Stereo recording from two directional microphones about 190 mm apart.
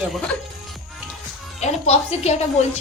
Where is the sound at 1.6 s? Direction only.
35° left (ahead or behind).